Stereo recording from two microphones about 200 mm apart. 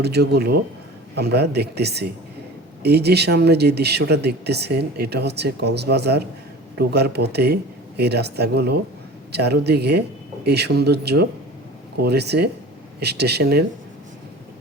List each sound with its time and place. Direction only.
0.0 s speech: 55° right (ahead or behind)